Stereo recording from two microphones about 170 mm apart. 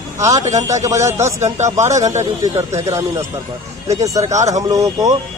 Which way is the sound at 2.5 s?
15° right (ahead or behind).